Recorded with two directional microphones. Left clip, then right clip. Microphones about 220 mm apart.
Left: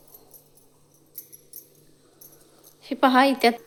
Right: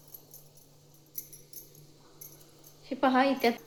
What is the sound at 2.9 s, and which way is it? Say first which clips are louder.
Speech: left 7 dB; 50° left (ahead or behind).